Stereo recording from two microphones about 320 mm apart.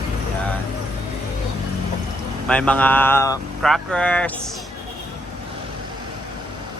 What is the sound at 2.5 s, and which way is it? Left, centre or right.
Speech, centre.